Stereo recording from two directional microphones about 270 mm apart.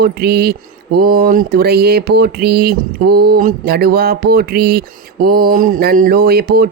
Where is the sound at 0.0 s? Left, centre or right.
Right.